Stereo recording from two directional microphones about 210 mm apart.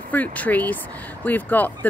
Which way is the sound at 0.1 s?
5° left (ahead or behind).